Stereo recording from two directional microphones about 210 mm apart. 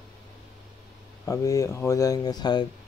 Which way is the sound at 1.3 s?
15° left (ahead or behind).